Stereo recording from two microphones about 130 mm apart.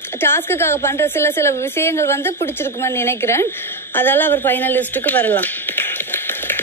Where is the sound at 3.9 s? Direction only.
15° left (ahead or behind).